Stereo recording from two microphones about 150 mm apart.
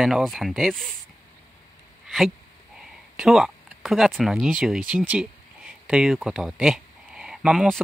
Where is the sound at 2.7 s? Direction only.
5° right (ahead or behind).